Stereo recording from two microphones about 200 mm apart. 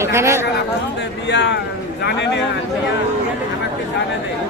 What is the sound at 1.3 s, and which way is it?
A man's voice, 60° left (ahead or behind).